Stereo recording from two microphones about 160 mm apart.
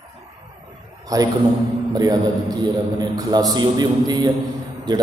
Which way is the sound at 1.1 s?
20° right (ahead or behind).